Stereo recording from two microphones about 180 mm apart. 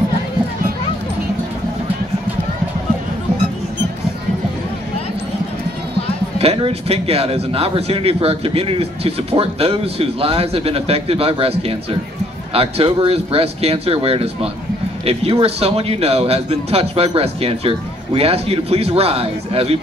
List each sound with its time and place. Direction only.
6.3 s speech: 35° right (ahead or behind)